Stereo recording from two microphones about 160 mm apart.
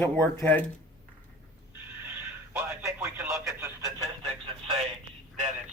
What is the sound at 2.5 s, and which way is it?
Radio, 15° right (ahead or behind).